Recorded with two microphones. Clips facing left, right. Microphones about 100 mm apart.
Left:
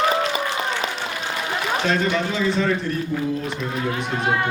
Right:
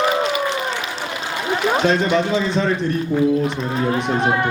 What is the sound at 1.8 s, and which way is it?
A man's voice, 25° right (ahead or behind).